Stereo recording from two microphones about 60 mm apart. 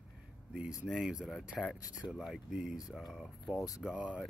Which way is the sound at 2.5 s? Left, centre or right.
Centre.